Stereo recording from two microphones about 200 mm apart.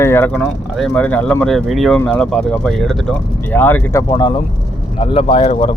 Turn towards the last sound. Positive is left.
turn(degrees=30)  # may be behind; listen again after turning